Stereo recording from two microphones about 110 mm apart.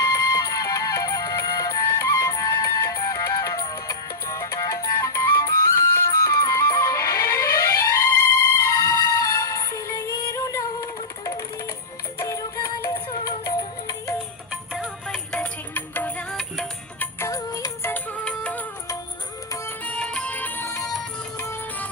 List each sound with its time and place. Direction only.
0.0 s music: 30° left (ahead or behind)
12.2 s music: 25° left (ahead or behind)
15.0 s music: 5° left (ahead or behind)
16.3 s music: centre (ahead or behind)
17.0 s music: 25° left (ahead or behind)
17.9 s music: 15° left (ahead or behind)
19.8 s music: 10° left (ahead or behind)